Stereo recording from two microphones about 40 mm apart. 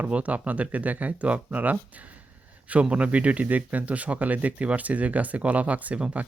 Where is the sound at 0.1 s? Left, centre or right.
Right.